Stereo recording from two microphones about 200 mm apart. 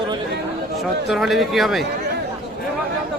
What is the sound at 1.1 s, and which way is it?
Speech, centre (ahead or behind).